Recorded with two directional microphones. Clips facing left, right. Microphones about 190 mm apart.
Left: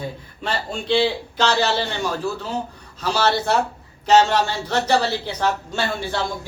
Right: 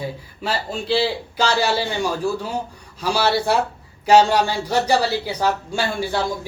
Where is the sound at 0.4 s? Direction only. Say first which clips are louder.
Right 1 dB; 5° right (ahead or behind).